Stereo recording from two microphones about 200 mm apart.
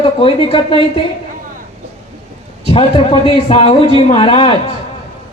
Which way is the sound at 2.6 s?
25° left (ahead or behind).